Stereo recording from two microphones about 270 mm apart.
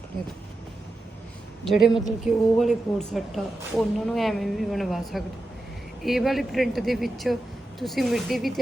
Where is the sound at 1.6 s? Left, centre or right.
Centre.